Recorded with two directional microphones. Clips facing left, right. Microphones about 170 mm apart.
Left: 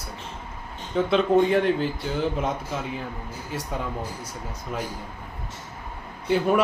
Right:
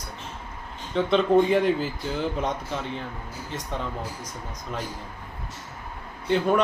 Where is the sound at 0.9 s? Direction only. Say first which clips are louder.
Even; centre (ahead or behind).